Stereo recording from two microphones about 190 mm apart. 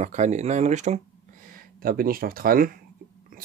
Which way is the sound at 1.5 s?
50° right (ahead or behind).